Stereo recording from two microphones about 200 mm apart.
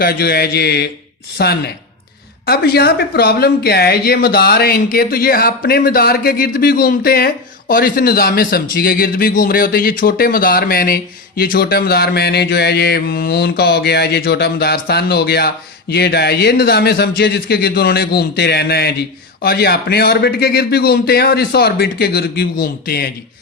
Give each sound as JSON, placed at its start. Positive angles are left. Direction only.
{"t": 0.0, "sound": "speech", "side_deg": 50}